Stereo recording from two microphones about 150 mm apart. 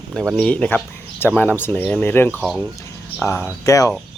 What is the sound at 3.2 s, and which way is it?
Speech, 20° left (ahead or behind).